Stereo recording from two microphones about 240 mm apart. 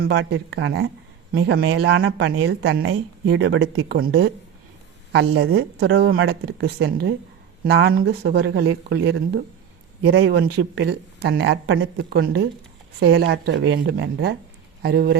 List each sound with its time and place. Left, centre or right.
0.0 s speech: right